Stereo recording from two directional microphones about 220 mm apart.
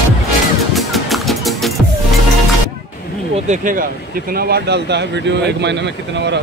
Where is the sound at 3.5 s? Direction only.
40° right (ahead or behind).